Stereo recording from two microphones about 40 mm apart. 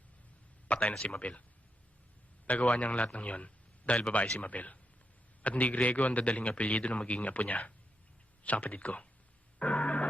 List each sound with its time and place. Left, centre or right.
0.8 s a man's voice: left
2.6 s a man's voice: left
9.6 s a sound: left